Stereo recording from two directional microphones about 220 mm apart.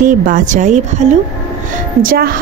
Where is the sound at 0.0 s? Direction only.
35° right (ahead or behind).